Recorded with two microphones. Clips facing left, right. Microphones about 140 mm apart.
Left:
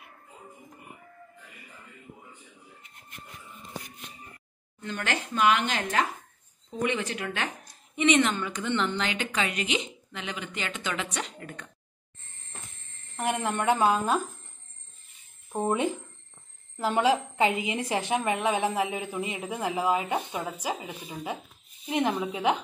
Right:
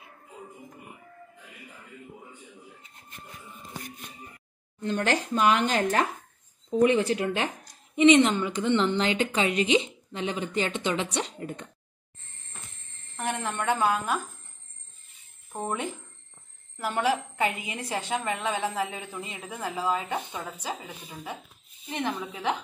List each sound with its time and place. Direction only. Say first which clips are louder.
4.8 s a woman's voice: right 6 dB; 35° right (ahead or behind)
13.1 s speech: left 3 dB; 15° left (ahead or behind)
15.5 s a woman's voice: left 5 dB; 15° left (ahead or behind)